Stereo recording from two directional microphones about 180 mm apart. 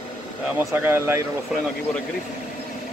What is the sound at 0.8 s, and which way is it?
Speech, 15° right (ahead or behind).